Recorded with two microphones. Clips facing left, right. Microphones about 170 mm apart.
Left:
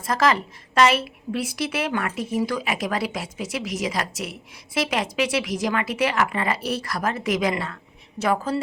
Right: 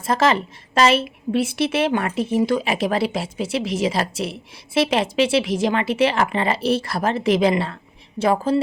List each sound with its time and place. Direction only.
0.1 s a woman's voice: 25° right (ahead or behind)